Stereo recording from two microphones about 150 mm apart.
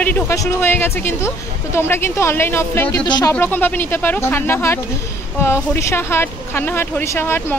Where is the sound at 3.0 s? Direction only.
30° left (ahead or behind).